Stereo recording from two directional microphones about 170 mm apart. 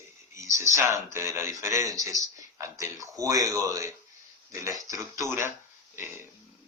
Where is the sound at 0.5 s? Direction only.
15° right (ahead or behind).